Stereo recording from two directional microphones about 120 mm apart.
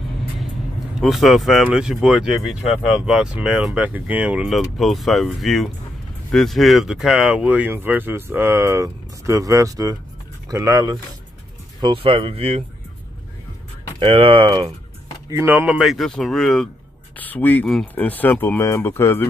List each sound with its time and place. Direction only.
1.0 s speech: centre (ahead or behind)
4.5 s speech: centre (ahead or behind); by 11.0 s 30° right (ahead or behind)
11.8 s speech: 50° right (ahead or behind)
13.9 s speech: 50° right (ahead or behind)
15.2 s speech: 20° right (ahead or behind)
15.8 s speech: centre (ahead or behind)
17.2 s speech: 15° left (ahead or behind)